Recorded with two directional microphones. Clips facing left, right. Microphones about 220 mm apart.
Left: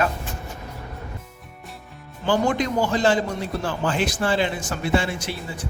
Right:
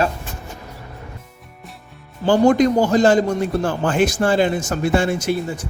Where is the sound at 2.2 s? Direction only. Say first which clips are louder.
Right 8 dB; 45° right (ahead or behind).